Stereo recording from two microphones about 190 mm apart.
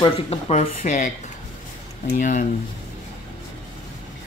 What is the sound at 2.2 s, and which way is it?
Speech, 40° left (ahead or behind).